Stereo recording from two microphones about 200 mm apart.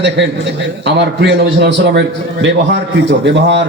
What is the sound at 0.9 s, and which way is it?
A man's voice, 60° right (ahead or behind).